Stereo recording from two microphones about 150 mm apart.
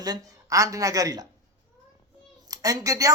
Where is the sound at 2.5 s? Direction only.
25° right (ahead or behind).